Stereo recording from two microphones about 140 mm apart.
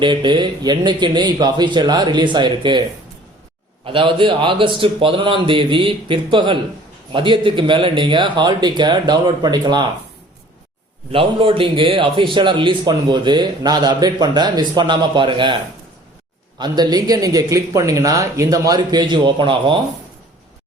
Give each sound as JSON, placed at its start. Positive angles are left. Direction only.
{"t": 0.0, "sound": "a man's voice", "side_deg": -35}
{"t": 3.8, "sound": "a man's voice", "side_deg": -35}
{"t": 11.1, "sound": "a man's voice", "side_deg": -40}
{"t": 16.6, "sound": "speech", "side_deg": -30}